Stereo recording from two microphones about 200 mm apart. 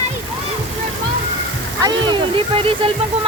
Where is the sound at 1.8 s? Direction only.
25° right (ahead or behind).